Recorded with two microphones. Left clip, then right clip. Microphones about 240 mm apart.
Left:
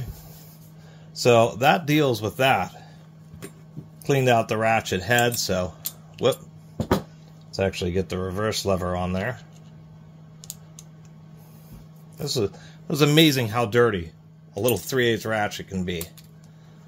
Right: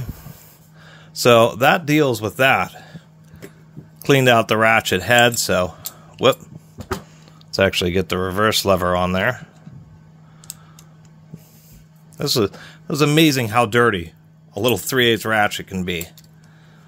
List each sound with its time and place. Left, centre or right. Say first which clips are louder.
1.1 s speech: right 5 dB; right
4.0 s speech: right 6 dB; right
7.5 s speech: right 8 dB; right
12.2 s speech: right 7 dB; right
12.8 s speech: right 3 dB; right